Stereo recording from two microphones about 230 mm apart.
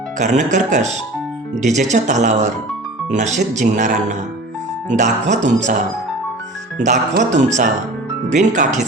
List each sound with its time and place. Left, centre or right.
0.2 s speech: right
6.8 s speech: right